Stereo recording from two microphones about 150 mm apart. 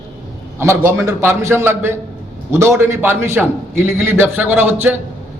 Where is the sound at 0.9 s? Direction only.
20° right (ahead or behind).